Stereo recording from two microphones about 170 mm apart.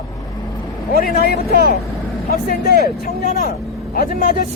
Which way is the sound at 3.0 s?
60° left (ahead or behind).